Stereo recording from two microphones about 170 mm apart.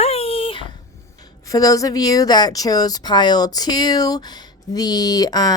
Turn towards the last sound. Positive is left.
turn(degrees=25)  # may be behind; listen again after turning